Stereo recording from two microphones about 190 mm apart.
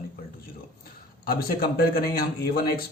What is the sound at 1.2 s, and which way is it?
Speech, 50° left (ahead or behind).